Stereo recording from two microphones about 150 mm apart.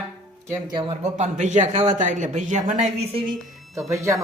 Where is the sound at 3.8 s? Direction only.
20° right (ahead or behind).